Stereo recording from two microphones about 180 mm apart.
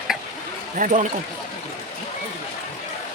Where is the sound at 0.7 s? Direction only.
45° right (ahead or behind).